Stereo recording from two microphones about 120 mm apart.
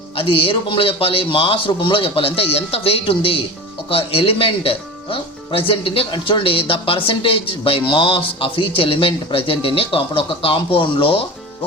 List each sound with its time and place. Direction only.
0.2 s speech: 50° left (ahead or behind)